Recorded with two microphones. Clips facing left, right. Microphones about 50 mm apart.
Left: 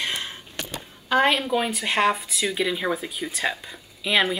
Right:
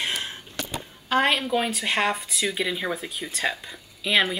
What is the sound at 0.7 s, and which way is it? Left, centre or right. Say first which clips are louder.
Speech: left 2 dB; centre.